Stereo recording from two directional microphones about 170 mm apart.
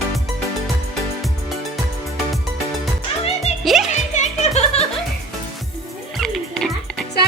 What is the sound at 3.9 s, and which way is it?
Music, 45° left (ahead or behind).